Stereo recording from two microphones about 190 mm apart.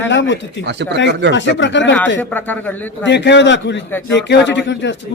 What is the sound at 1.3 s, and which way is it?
Speech, 70° left (ahead or behind).